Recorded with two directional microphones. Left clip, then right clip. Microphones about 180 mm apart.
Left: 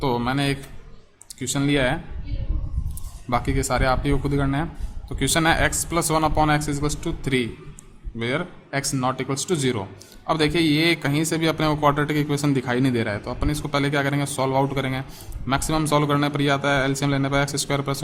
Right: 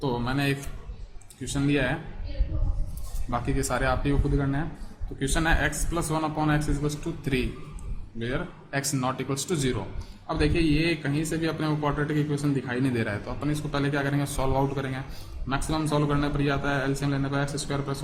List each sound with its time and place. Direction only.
0.0 s a man's voice: 35° left (ahead or behind)
3.2 s a man's voice: 30° left (ahead or behind)
10.2 s a man's voice: 40° left (ahead or behind)
12.9 s a man's voice: 25° left (ahead or behind)